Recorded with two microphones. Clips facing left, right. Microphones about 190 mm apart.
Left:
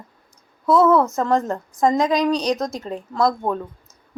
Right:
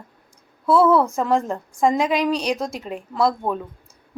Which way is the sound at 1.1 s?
10° right (ahead or behind).